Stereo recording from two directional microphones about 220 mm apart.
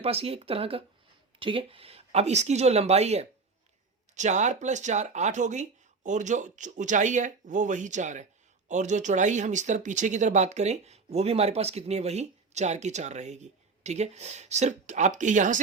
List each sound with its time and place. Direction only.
0.0 s speech: 25° right (ahead or behind)